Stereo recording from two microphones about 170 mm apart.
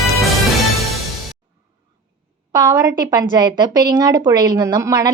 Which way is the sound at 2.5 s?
25° right (ahead or behind).